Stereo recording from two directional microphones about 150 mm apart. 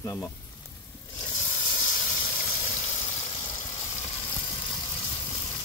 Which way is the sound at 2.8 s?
20° left (ahead or behind).